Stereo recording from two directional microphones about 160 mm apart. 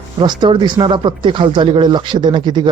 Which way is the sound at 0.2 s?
30° right (ahead or behind).